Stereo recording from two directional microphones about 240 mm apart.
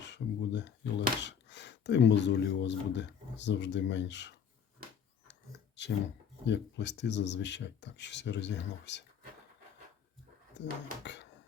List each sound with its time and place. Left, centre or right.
0.1 s speech: left
5.3 s a sound: left
6.4 s speech: left
10.6 s speech: left
11.0 s music: left